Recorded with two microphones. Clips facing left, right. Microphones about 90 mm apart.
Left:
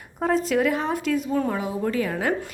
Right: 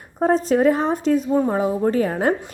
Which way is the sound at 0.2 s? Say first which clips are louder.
Right 5 dB; 35° right (ahead or behind).